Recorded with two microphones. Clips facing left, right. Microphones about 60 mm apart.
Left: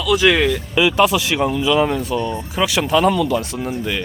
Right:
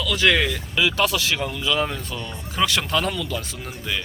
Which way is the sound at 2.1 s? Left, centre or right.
Left.